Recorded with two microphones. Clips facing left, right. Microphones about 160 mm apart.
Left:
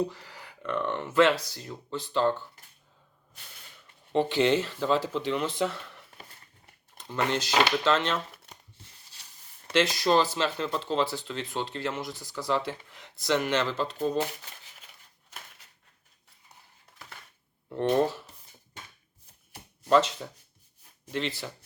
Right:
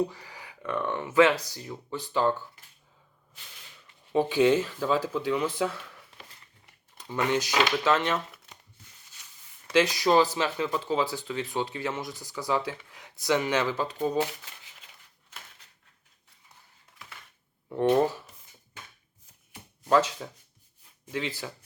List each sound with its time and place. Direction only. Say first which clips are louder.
0.3 s speech: even; 10° right (ahead or behind)
4.1 s speech: right 2 dB; 5° right (ahead or behind)
6.9 s speech: right 2 dB; 10° right (ahead or behind)
8.8 s a sound: left 1 dB; 30° left (ahead or behind)
9.7 s speech: right 2 dB; 15° right (ahead or behind)
17.7 s speech: right 2 dB; 10° right (ahead or behind)
21.2 s speech: left 1 dB; 10° right (ahead or behind)